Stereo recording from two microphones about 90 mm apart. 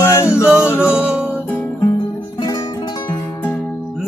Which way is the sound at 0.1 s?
30° left (ahead or behind).